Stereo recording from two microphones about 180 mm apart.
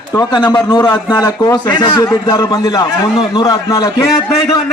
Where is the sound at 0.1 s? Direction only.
20° left (ahead or behind).